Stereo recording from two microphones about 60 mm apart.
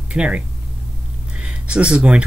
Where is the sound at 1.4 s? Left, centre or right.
Centre.